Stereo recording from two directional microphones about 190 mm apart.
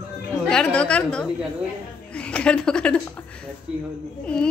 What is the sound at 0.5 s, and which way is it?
A woman's voice, 5° left (ahead or behind).